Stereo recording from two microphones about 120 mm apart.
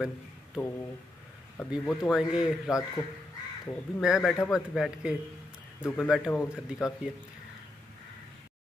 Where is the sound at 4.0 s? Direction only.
5° right (ahead or behind).